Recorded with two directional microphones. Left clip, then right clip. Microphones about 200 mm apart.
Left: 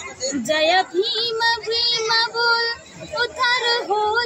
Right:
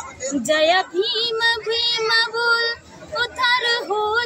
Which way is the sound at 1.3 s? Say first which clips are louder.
Even; 5° left (ahead or behind).